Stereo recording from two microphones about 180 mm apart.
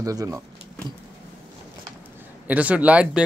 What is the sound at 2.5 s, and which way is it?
Speech, 10° right (ahead or behind).